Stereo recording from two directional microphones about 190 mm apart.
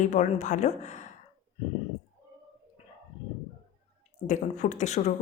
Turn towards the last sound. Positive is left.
turn(degrees=40)  # may be behind; listen again after turning